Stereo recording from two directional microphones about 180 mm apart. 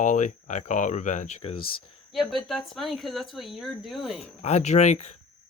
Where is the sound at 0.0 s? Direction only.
45° left (ahead or behind).